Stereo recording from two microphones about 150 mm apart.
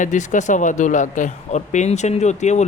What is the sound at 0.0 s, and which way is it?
Speech, 55° left (ahead or behind).